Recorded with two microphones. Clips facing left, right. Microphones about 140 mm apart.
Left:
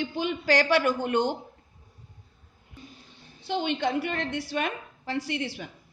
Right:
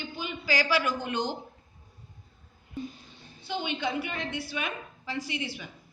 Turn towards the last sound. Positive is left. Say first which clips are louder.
# left 3 dB
turn(degrees=80)